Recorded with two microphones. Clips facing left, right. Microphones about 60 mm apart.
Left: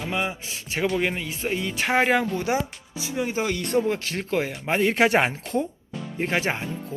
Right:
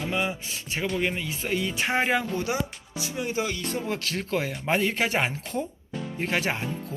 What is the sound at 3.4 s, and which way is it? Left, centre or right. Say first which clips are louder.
Speech: left 6 dB; left.